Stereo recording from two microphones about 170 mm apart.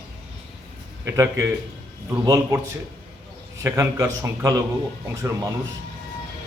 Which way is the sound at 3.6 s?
15° right (ahead or behind).